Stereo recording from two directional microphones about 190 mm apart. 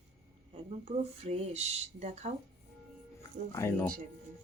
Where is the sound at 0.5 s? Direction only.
35° right (ahead or behind).